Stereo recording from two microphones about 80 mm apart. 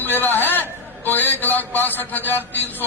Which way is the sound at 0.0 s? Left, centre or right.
Left.